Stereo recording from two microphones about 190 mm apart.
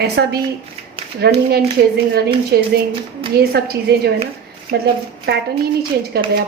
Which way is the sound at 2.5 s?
60° right (ahead or behind).